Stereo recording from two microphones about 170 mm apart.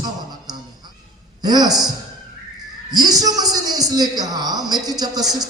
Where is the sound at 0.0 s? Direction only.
25° right (ahead or behind).